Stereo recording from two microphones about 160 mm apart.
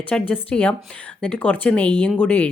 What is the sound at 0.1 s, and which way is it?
A woman's voice, 5° left (ahead or behind).